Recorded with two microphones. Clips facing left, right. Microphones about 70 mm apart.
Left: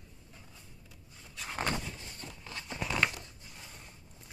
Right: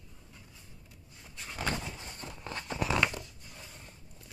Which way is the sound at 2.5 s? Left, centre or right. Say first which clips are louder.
Right 5 dB; right.